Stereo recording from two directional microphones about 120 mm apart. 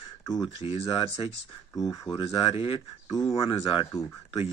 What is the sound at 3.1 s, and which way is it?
Speech, 30° left (ahead or behind).